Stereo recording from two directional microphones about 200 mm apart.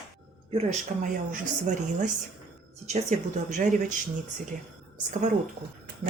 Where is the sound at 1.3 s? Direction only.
40° right (ahead or behind).